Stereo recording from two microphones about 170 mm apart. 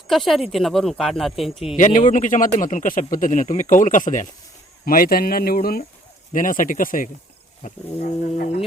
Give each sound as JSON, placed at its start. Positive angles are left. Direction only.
{"t": 0.1, "sound": "speech", "side_deg": 0}
{"t": 2.0, "sound": "speech", "side_deg": 45}